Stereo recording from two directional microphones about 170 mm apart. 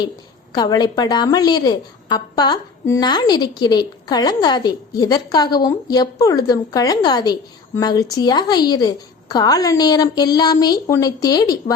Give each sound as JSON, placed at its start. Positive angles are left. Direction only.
{"t": 0.5, "sound": "a woman's voice", "side_deg": 25}